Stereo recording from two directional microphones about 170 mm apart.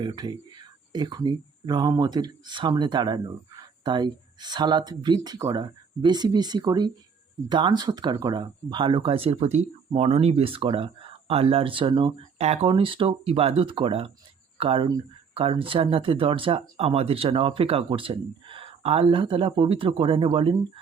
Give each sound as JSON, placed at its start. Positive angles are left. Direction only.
{"t": 0.0, "sound": "speech", "side_deg": -25}